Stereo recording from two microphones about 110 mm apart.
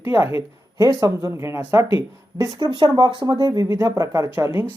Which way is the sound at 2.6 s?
45° right (ahead or behind).